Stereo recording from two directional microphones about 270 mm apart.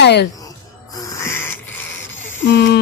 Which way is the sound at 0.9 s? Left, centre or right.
Centre.